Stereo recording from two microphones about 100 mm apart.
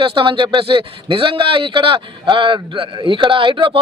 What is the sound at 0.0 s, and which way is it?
A man's voice, 60° right (ahead or behind).